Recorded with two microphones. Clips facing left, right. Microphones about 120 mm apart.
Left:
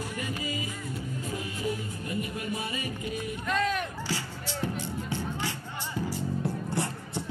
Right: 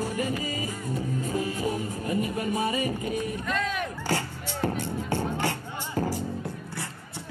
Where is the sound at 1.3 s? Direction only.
35° right (ahead or behind).